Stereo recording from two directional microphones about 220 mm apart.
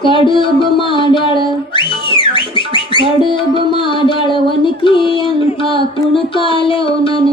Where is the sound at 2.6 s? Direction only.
20° left (ahead or behind).